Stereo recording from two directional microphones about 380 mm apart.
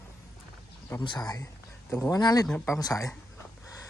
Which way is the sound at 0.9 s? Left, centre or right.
Centre.